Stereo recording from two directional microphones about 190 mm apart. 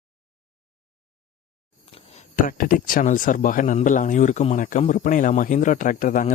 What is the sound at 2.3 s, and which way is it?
Speech, 45° left (ahead or behind).